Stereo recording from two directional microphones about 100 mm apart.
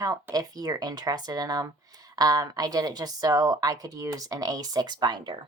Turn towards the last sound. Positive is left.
turn(degrees=-50)  # may be behind; listen again after turning